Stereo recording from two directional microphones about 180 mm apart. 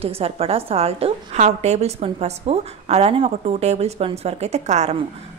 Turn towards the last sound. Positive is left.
turn(degrees=-40)  # may be behind; listen again after turning